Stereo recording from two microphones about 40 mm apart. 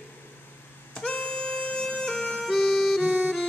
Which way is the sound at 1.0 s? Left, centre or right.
Left.